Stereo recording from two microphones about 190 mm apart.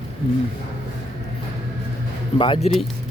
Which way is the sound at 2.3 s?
25° left (ahead or behind).